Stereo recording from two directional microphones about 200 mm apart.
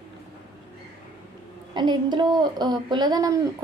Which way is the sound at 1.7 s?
20° right (ahead or behind).